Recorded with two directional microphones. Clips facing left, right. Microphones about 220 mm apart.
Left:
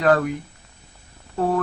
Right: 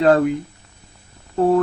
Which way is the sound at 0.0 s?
25° right (ahead or behind).